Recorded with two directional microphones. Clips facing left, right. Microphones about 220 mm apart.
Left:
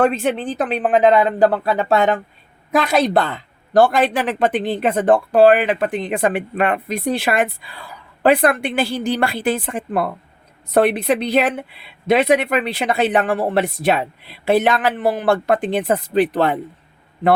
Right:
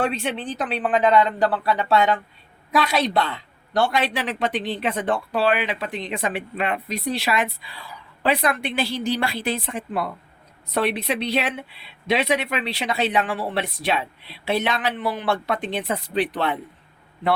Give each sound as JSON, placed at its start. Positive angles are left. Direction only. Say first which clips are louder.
{"t": 0.0, "sound": "a woman's voice", "louder": "left 7 dB", "side_deg": 45}